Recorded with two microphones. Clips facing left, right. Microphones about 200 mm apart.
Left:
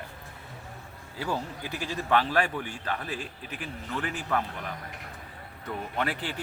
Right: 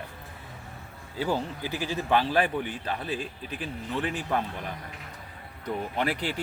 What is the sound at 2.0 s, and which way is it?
Speech, 20° right (ahead or behind).